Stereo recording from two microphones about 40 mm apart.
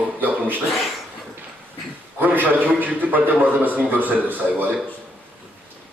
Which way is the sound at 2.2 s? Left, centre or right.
Right.